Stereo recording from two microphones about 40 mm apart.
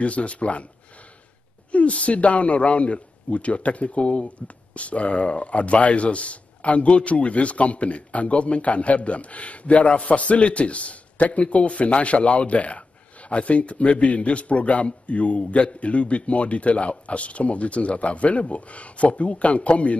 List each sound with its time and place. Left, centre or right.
0.0 s a man's voice: left
1.7 s a man's voice: left